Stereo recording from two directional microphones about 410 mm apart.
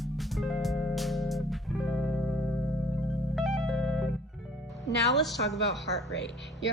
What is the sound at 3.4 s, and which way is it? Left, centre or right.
Music, centre.